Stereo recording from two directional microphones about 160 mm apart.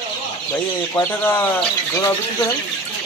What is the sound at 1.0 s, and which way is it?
Speech, 10° left (ahead or behind).